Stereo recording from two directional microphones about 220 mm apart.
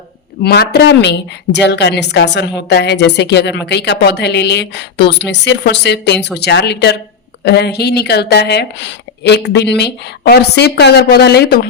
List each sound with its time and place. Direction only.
0.4 s a woman's voice: 45° left (ahead or behind)